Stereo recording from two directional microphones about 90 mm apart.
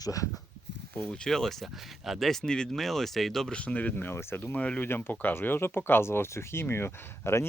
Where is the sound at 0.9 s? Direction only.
5° left (ahead or behind).